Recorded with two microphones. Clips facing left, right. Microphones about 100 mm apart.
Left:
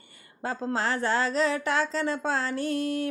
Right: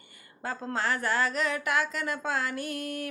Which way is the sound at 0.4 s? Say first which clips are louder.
Left 2 dB; 30° left (ahead or behind).